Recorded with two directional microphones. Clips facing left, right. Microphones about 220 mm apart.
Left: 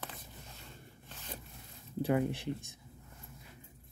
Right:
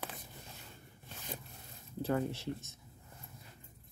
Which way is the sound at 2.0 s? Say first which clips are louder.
Left 3 dB; 15° left (ahead or behind).